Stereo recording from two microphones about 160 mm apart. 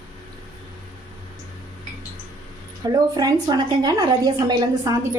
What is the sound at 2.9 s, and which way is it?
A woman's voice, 25° right (ahead or behind).